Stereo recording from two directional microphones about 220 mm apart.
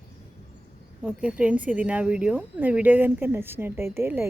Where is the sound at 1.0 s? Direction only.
5° right (ahead or behind).